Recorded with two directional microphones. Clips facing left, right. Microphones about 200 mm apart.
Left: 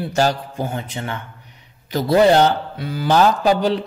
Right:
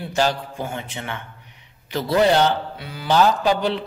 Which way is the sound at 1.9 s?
45° left (ahead or behind).